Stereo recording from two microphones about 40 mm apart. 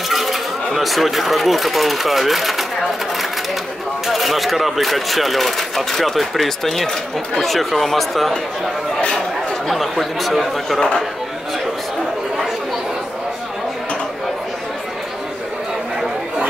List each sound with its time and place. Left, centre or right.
0.1 s a sound: centre
0.7 s speech: centre
4.1 s speech: centre
9.7 s speech: centre